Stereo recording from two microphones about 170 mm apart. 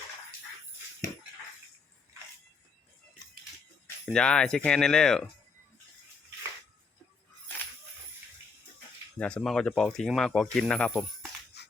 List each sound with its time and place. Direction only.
4.1 s speech: 5° left (ahead or behind)
9.1 s speech: 5° left (ahead or behind)
11.6 s a sound: 80° left